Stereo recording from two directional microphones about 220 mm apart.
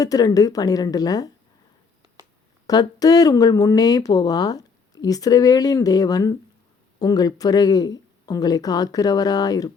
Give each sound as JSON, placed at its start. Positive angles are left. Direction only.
{"t": 0.0, "sound": "speech", "side_deg": 15}
{"t": 2.6, "sound": "speech", "side_deg": 15}